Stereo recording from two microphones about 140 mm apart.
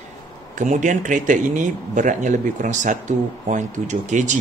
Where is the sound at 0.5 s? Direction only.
65° right (ahead or behind).